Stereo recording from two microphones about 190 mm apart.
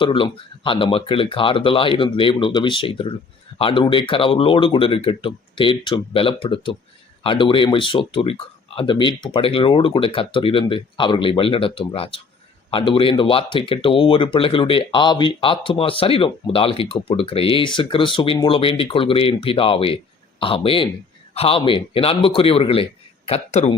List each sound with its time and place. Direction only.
0.0 s speech: 25° left (ahead or behind)